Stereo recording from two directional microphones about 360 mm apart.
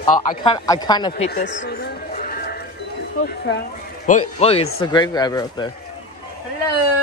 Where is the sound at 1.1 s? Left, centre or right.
Left.